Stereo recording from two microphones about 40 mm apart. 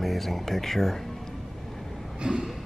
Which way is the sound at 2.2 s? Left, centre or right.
Centre.